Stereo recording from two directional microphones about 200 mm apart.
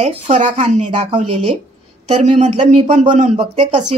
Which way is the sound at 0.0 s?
35° right (ahead or behind).